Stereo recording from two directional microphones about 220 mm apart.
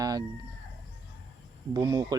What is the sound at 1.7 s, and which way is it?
Speech, 15° right (ahead or behind).